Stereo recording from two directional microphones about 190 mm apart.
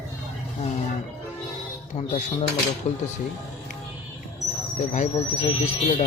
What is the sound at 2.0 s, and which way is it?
Speech, 30° left (ahead or behind).